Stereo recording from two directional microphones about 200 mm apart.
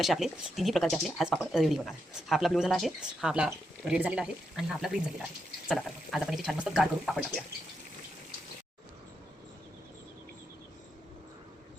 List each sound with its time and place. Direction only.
0.0 s speech: centre (ahead or behind)